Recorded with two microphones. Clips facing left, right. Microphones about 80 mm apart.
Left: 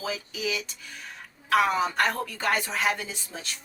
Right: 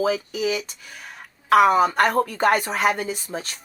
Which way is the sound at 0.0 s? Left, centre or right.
Right.